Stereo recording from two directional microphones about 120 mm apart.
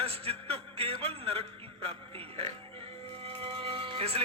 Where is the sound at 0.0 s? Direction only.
55° right (ahead or behind).